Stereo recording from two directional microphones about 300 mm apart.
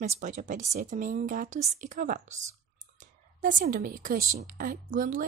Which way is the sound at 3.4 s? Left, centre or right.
Right.